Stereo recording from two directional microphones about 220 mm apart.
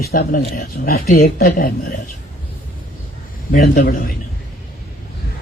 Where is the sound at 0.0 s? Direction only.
45° left (ahead or behind).